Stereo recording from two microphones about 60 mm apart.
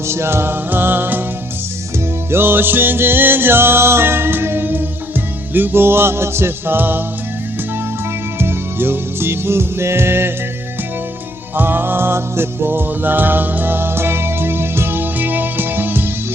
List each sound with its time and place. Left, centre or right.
0.1 s music: right
2.3 s music: right
8.4 s music: right
11.5 s music: right